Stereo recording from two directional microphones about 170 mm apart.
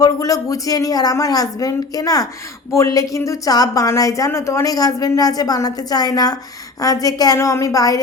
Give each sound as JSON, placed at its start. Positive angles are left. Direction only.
{"t": 0.0, "sound": "a woman's voice", "side_deg": 20}